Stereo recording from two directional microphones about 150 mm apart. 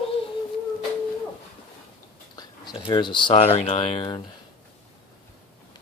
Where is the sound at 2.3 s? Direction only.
30° left (ahead or behind).